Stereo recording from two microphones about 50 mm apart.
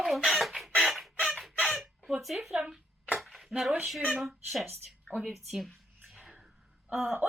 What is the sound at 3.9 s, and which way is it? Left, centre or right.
Speech, centre.